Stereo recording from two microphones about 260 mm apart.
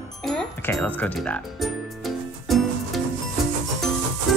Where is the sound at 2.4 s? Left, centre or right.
Centre.